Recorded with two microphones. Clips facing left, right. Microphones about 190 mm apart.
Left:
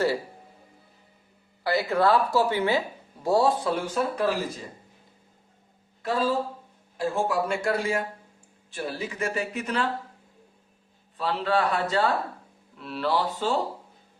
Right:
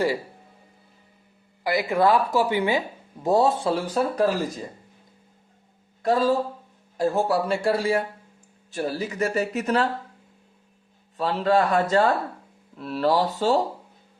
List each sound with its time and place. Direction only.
1.6 s speech: 15° right (ahead or behind); by 4.4 s 40° right (ahead or behind)
6.0 s speech: 45° right (ahead or behind)
11.2 s a man's voice: 45° right (ahead or behind)